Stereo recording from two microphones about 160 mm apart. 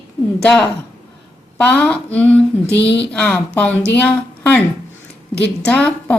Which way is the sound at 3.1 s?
5° left (ahead or behind).